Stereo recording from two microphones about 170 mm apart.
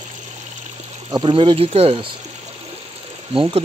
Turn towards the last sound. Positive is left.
turn(degrees=-30)  # may be behind; listen again after turning